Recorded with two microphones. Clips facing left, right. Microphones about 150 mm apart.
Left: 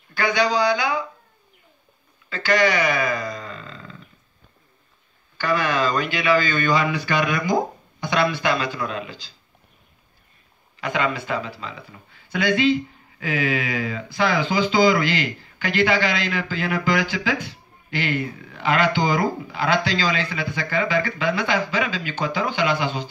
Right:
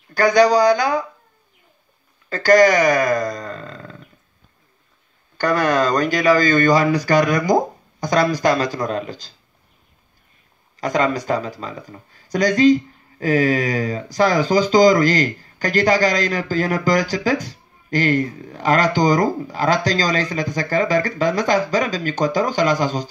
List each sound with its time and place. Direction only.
0.1 s speech: 40° right (ahead or behind)
2.2 s speech: 40° right (ahead or behind)
5.4 s speech: 45° right (ahead or behind)
10.8 s speech: 40° right (ahead or behind)